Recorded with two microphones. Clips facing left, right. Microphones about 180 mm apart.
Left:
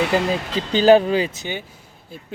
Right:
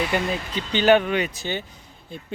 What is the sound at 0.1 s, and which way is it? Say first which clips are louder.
Speech: left 5 dB; 30° left (ahead or behind).